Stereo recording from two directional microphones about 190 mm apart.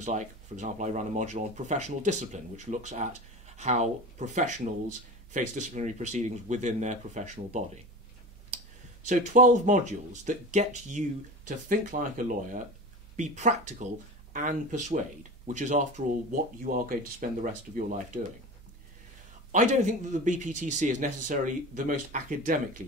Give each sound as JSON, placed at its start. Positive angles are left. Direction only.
{"t": 0.0, "sound": "speech", "side_deg": -40}
{"t": 9.0, "sound": "speech", "side_deg": -40}
{"t": 19.5, "sound": "speech", "side_deg": -40}